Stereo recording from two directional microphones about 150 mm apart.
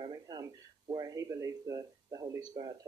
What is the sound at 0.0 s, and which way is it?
A man's voice, 30° right (ahead or behind).